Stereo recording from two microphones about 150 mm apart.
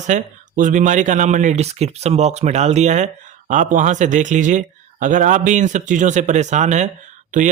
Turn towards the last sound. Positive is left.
turn(degrees=-60)  # may be behind; listen again after turning